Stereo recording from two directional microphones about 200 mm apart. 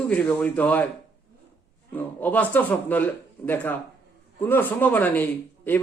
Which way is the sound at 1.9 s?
10° left (ahead or behind).